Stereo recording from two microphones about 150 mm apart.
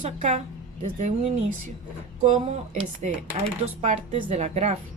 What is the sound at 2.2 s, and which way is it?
A woman's voice, 50° right (ahead or behind).